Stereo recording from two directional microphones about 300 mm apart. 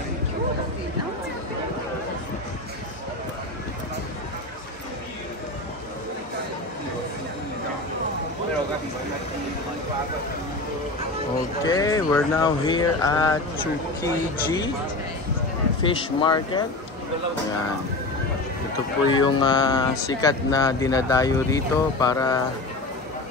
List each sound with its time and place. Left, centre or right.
11.6 s a sound: centre
14.0 s speech: centre
15.8 s speech: centre
19.0 s speech: centre